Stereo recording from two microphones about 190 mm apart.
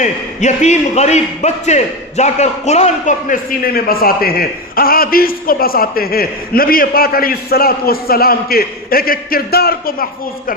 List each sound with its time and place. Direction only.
0.0 s a man's voice: 40° left (ahead or behind)